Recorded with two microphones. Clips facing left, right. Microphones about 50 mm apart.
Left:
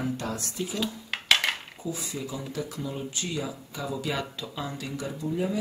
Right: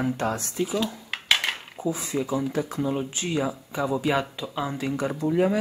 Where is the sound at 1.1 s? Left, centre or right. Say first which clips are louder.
Left 1 dB; centre.